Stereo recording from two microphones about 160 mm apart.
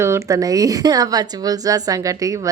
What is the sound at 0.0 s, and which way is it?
A woman's voice, 15° right (ahead or behind).